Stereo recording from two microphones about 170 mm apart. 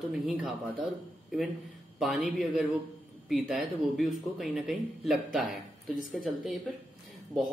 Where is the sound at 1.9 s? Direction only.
Centre (ahead or behind).